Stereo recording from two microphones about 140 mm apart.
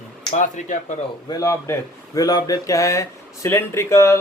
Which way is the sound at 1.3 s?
25° left (ahead or behind).